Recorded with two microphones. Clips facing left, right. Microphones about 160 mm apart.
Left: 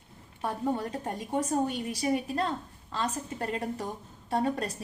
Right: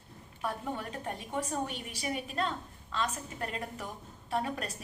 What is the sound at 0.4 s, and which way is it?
A woman's voice, 30° left (ahead or behind).